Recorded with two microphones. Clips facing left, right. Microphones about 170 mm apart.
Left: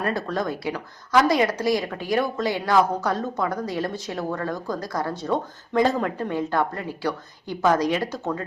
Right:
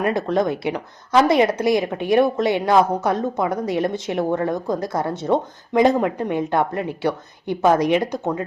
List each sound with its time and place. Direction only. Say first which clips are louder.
0.0 s speech: right 6 dB; 20° right (ahead or behind)